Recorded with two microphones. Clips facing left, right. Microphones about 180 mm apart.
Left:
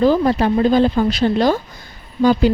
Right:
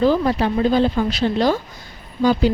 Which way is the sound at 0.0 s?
45° left (ahead or behind).